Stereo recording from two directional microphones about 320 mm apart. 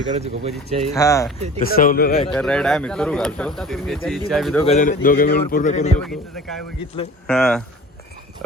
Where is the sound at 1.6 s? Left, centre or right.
Left.